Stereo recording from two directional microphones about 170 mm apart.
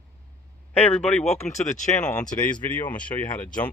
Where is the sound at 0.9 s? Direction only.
5° left (ahead or behind).